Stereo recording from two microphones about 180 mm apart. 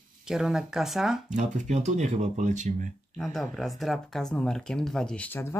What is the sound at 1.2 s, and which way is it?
Speech, 40° right (ahead or behind).